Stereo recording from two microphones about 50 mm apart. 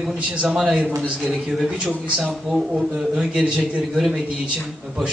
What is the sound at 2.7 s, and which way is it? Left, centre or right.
A man's voice, centre.